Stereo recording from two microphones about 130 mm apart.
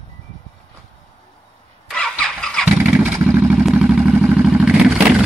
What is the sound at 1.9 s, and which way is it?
Vehicle, 5° left (ahead or behind).